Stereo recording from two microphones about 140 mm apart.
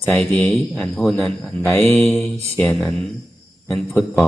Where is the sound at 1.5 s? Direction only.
15° left (ahead or behind).